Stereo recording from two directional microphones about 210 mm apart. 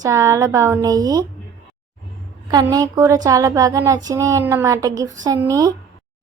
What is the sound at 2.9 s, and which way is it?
A woman's voice, 15° right (ahead or behind).